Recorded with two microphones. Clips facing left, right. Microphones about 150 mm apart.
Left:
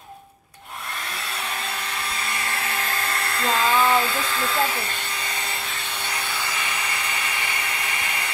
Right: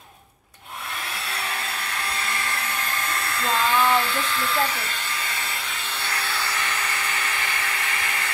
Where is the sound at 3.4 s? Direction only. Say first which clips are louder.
Left 1 dB; 5° left (ahead or behind).